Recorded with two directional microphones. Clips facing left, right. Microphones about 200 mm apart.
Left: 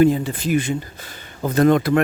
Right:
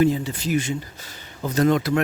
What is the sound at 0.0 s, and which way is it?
Speech, 55° left (ahead or behind).